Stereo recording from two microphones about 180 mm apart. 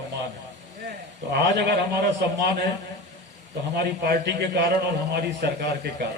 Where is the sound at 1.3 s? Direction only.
65° right (ahead or behind).